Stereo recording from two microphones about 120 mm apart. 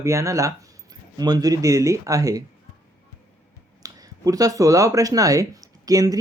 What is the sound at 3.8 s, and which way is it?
Speech, 30° right (ahead or behind).